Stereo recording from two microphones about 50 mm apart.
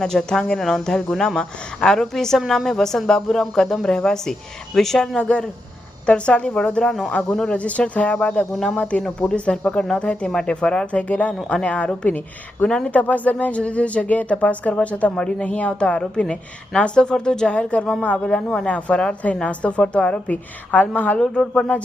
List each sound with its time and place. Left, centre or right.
0.0 s speech: centre
5.1 s speech: centre
8.4 s speech: centre
8.7 s speech: left
12.6 s speech: centre
12.9 s speech: left
16.0 s speech: centre
18.6 s speech: left
21.2 s speech: centre